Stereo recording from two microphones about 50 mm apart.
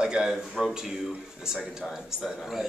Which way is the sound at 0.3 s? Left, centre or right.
Centre.